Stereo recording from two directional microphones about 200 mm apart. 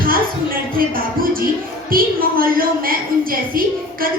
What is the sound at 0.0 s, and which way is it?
Music, 45° right (ahead or behind).